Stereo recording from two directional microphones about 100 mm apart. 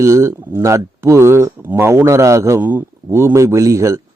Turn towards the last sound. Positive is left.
turn(degrees=-30)  # may be behind; listen again after turning